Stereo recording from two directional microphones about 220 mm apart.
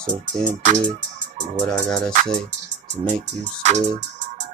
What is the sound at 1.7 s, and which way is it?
Music, 5° left (ahead or behind).